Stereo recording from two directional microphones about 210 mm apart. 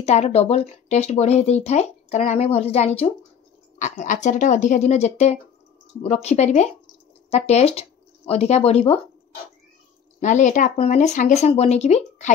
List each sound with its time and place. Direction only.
0.0 s speech: 30° left (ahead or behind)
10.2 s speech: 35° left (ahead or behind)